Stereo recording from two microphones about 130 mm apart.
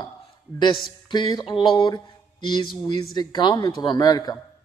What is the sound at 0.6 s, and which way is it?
A man's voice, 35° left (ahead or behind).